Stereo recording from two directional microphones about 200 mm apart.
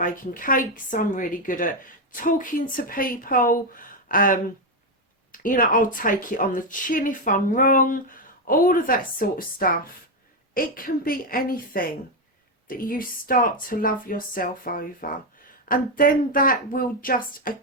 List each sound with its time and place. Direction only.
0.0 s a woman's voice: 45° left (ahead or behind)